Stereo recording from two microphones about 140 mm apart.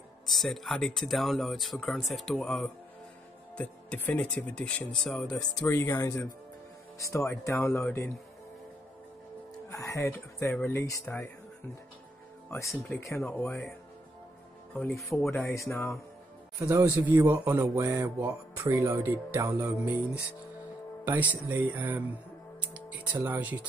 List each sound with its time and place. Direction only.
0.3 s speech: centre (ahead or behind)
5.7 s speech: 20° left (ahead or behind)
9.7 s speech: 20° left (ahead or behind)
12.6 s speech: centre (ahead or behind)
13.0 s speech: 15° left (ahead or behind)
14.9 s speech: centre (ahead or behind)
15.3 s speech: 15° left (ahead or behind)
16.5 s speech: 20° right (ahead or behind)
21.0 s speech: 10° right (ahead or behind)
22.6 s music: 10° right (ahead or behind)